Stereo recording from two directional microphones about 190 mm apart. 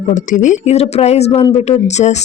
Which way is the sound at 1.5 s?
35° left (ahead or behind).